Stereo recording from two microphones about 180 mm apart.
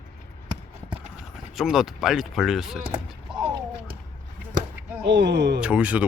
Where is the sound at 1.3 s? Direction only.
5° right (ahead or behind).